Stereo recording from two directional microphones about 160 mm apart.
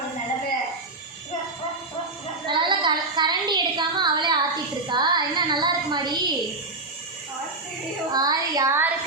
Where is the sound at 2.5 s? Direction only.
30° right (ahead or behind).